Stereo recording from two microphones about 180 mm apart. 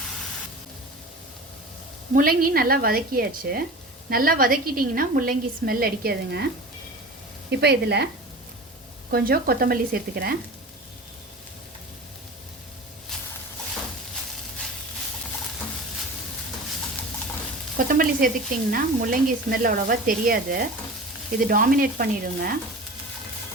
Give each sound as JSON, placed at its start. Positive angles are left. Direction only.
{"t": 2.1, "sound": "a woman's voice", "side_deg": -55}
{"t": 7.5, "sound": "a woman's voice", "side_deg": -65}
{"t": 17.7, "sound": "stir", "side_deg": -50}
{"t": 18.7, "sound": "speech", "side_deg": -50}